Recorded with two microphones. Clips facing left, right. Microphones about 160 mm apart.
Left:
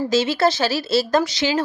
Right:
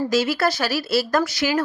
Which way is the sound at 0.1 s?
25° left (ahead or behind).